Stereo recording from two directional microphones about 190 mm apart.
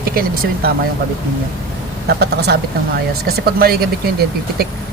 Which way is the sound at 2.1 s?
60° right (ahead or behind).